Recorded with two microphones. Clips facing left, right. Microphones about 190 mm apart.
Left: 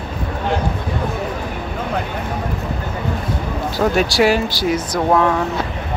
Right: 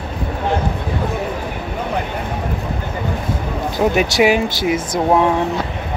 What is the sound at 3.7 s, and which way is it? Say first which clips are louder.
Speech: right 1 dB; 20° right (ahead or behind).